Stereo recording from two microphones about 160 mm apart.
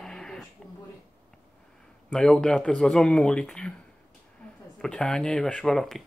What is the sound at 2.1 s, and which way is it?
Speech, 5° left (ahead or behind).